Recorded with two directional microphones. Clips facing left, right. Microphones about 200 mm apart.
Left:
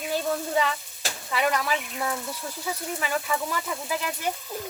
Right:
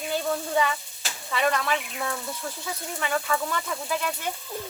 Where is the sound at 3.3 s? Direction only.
15° left (ahead or behind).